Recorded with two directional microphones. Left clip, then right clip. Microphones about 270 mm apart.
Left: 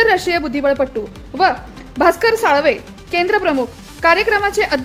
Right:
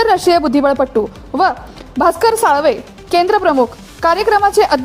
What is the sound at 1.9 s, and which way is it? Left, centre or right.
Speech, centre.